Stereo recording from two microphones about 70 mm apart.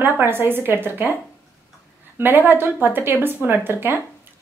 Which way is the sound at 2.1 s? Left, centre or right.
Right.